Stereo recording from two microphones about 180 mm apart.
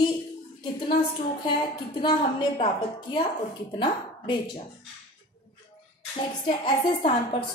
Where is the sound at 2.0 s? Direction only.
25° left (ahead or behind).